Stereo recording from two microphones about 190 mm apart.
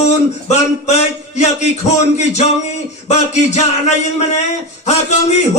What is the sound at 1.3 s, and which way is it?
Speech, 35° left (ahead or behind).